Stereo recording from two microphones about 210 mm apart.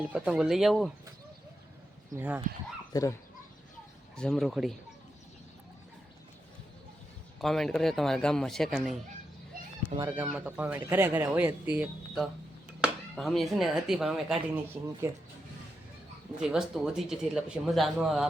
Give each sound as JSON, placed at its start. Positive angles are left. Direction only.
{"t": 0.1, "sound": "speech", "side_deg": -5}
{"t": 2.1, "sound": "speech", "side_deg": -5}
{"t": 2.9, "sound": "speech", "side_deg": 15}
{"t": 4.1, "sound": "speech", "side_deg": 5}
{"t": 7.4, "sound": "speech", "side_deg": 0}
{"t": 10.3, "sound": "speech", "side_deg": -5}
{"t": 16.4, "sound": "speech", "side_deg": -5}